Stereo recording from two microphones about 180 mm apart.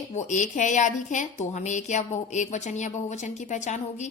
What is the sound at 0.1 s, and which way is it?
Speech, 40° left (ahead or behind).